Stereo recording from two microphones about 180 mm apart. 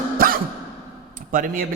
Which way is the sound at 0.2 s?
55° right (ahead or behind).